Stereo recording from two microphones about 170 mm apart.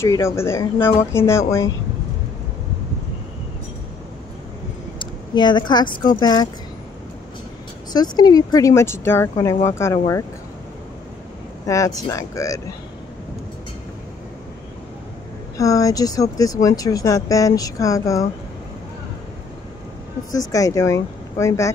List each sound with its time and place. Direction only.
0.0 s speech: 15° left (ahead or behind)
4.9 s speech: 25° left (ahead or behind)
7.9 s speech: 25° left (ahead or behind)
11.6 s speech: 20° left (ahead or behind)
15.5 s speech: 20° left (ahead or behind)
20.3 s speech: 20° left (ahead or behind)